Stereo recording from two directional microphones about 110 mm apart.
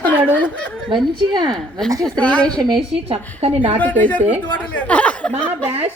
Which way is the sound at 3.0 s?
65° right (ahead or behind).